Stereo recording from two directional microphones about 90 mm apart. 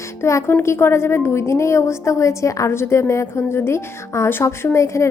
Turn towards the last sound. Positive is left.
turn(degrees=35)  # may be behind; listen again after turning